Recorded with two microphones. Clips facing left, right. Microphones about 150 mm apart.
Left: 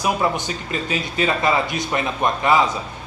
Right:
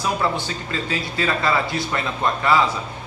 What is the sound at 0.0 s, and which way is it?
A man's voice, 15° left (ahead or behind).